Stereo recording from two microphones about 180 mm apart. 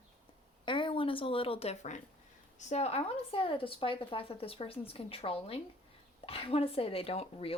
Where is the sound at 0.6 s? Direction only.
25° left (ahead or behind).